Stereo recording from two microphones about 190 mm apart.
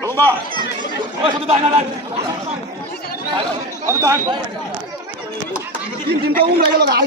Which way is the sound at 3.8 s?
15° right (ahead or behind).